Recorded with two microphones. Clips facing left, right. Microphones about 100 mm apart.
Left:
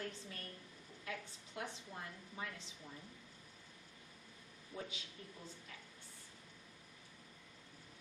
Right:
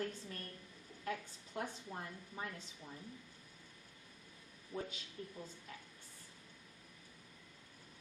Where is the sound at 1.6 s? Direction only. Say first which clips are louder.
Right 3 dB; 40° right (ahead or behind).